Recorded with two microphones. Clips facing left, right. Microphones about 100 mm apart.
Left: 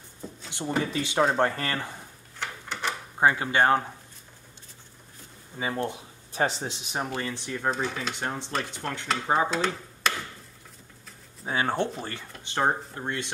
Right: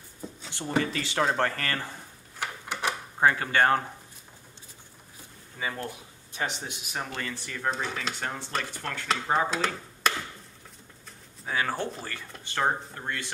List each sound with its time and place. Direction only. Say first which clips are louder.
0.7 s speech: even; centre (ahead or behind)
1.3 s speech: left 2 dB; 20° left (ahead or behind)
2.4 s a sound: right 1 dB; 10° right (ahead or behind)
3.2 s speech: left 1 dB; 15° left (ahead or behind)
5.6 s speech: left 4 dB; 25° left (ahead or behind)
7.7 s speech: left 2 dB; centre (ahead or behind)
8.1 s speech: left 2 dB; 20° left (ahead or behind)
9.0 s speech: left 1 dB; centre (ahead or behind)
9.5 s a sound: left 2 dB; centre (ahead or behind)
11.4 s speech: left 3 dB; 25° left (ahead or behind)